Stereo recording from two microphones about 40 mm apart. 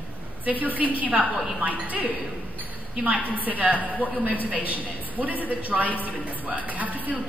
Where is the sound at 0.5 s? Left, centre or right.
Right.